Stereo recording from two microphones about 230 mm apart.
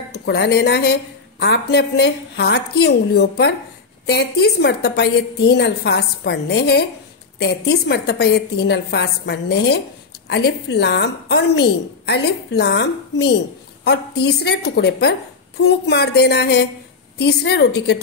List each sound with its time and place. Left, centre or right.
0.1 s a woman's voice: left